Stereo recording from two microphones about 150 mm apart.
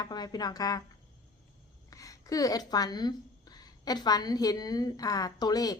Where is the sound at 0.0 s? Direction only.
25° left (ahead or behind).